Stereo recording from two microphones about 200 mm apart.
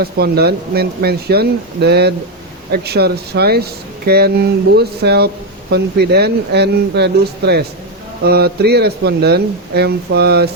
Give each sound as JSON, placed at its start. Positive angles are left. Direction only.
{"t": 0.0, "sound": "speech", "side_deg": -50}